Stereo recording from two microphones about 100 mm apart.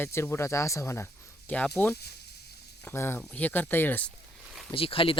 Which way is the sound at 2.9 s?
25° left (ahead or behind).